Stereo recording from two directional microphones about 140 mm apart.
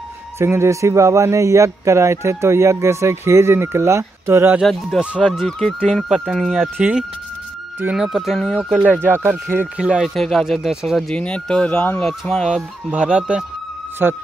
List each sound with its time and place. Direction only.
0.4 s speech: 20° right (ahead or behind)
4.6 s speech: centre (ahead or behind)
5.6 s speech: 5° left (ahead or behind)
8.7 s speech: 10° right (ahead or behind)